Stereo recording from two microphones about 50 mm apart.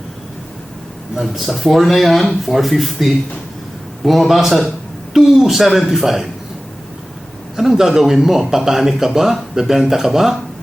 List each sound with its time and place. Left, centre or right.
1.1 s speech: centre
7.5 s speech: centre